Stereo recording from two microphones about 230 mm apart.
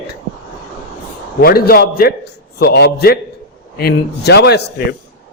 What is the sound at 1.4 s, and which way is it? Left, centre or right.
A man's voice, left.